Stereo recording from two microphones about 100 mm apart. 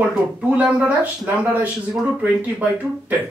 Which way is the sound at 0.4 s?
15° right (ahead or behind).